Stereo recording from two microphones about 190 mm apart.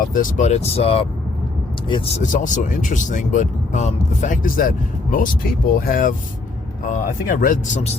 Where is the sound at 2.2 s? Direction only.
40° left (ahead or behind).